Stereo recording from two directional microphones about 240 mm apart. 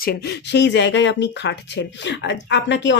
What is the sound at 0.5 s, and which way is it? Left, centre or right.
Speech, left.